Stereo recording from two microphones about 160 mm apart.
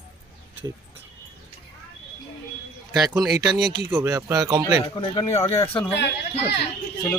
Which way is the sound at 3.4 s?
25° right (ahead or behind).